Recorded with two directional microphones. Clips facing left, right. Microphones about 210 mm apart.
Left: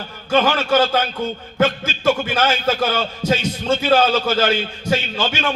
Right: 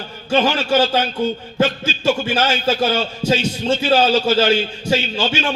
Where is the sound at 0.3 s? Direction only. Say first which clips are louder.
Even; 25° right (ahead or behind).